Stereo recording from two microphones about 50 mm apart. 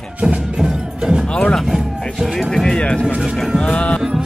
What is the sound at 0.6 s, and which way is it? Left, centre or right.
Music, centre.